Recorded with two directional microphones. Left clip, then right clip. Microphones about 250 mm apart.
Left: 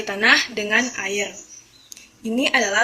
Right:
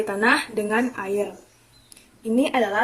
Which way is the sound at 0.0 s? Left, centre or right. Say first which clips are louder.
Left 3 dB; right.